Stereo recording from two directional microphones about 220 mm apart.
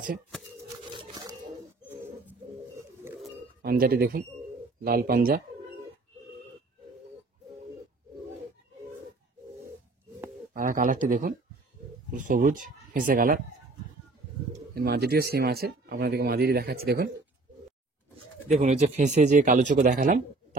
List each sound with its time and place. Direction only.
0.9 s a sound: 20° right (ahead or behind)
1.9 s bird: 10° right (ahead or behind)
3.6 s speech: 45° right (ahead or behind)
10.5 s speech: 35° right (ahead or behind)
14.5 s speech: 45° right (ahead or behind)
18.5 s speech: 30° right (ahead or behind)